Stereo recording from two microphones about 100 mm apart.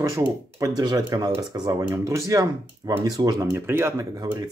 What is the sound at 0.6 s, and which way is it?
Speech, 40° right (ahead or behind).